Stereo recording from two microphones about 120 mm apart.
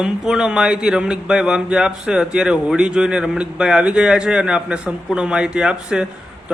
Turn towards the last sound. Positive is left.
turn(degrees=-5)  # may be behind; listen again after turning